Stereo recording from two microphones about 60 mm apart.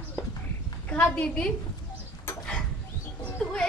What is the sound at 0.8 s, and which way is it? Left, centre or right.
Speech, centre.